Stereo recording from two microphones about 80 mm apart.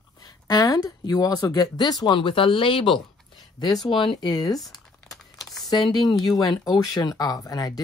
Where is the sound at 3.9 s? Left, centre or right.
Left.